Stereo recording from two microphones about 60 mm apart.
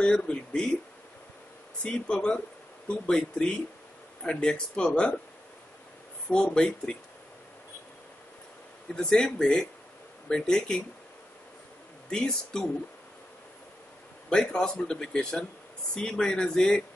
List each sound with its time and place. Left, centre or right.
0.0 s speech: centre
1.8 s speech: centre
6.3 s speech: centre
8.9 s speech: centre
12.1 s speech: centre
14.3 s speech: centre